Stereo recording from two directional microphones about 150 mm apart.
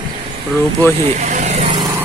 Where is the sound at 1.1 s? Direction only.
50° right (ahead or behind).